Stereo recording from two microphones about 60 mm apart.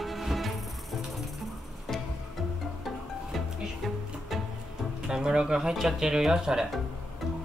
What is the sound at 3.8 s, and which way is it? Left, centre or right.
Music, centre.